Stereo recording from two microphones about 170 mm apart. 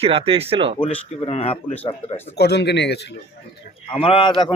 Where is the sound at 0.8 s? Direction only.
40° left (ahead or behind).